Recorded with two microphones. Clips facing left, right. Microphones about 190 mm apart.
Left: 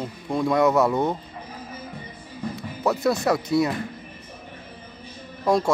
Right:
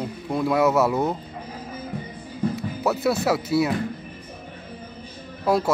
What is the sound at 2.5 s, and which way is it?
Speech, centre (ahead or behind).